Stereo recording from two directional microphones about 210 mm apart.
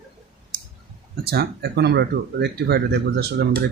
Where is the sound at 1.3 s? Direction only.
50° right (ahead or behind).